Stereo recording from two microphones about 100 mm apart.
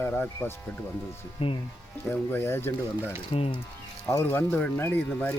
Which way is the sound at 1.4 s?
70° left (ahead or behind).